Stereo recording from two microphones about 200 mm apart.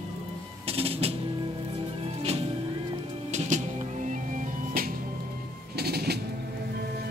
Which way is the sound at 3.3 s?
35° right (ahead or behind).